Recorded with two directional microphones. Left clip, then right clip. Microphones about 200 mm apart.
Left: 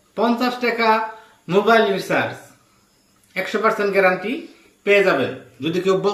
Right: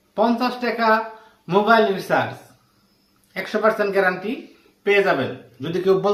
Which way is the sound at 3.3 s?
15° right (ahead or behind).